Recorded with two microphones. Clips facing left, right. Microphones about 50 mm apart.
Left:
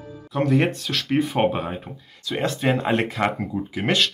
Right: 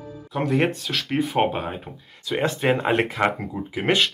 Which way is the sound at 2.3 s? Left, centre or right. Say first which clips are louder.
Right 1 dB; centre.